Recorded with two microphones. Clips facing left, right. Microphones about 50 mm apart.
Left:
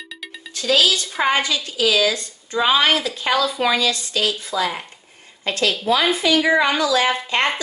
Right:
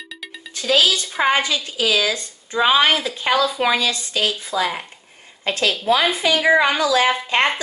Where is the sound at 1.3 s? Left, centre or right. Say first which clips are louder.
Right 1 dB; right.